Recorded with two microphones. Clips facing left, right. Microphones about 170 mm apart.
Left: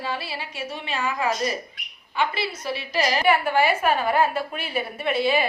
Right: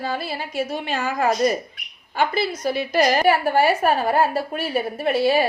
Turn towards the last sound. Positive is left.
turn(degrees=-40)  # may be behind; listen again after turning